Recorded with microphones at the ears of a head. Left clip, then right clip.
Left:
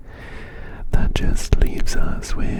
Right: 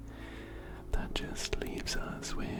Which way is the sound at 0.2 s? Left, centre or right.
Left.